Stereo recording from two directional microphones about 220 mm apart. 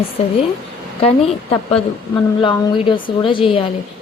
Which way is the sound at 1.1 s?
25° left (ahead or behind).